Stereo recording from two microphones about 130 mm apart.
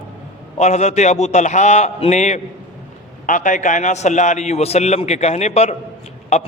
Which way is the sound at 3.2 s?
80° left.